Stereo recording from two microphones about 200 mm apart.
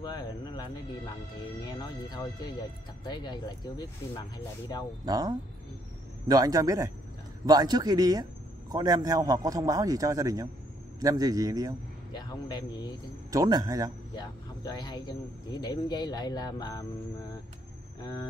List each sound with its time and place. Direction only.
0.0 s speech: 20° left (ahead or behind)
5.0 s a man's voice: 20° right (ahead or behind)
12.1 s speech: 20° left (ahead or behind)
13.3 s a man's voice: 20° right (ahead or behind)
14.1 s speech: 20° left (ahead or behind)
18.0 s speech: 20° left (ahead or behind)